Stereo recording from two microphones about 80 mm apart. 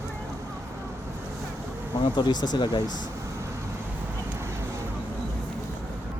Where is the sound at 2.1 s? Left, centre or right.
Left.